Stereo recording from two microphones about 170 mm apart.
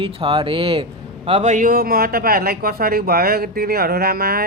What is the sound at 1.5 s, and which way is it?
Speech, 50° right (ahead or behind).